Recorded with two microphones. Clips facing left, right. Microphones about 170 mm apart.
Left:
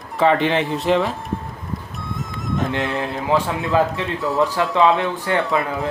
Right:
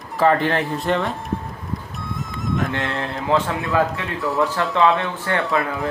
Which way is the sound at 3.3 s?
15° left (ahead or behind).